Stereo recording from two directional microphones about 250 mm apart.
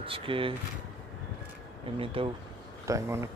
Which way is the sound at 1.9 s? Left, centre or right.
Right.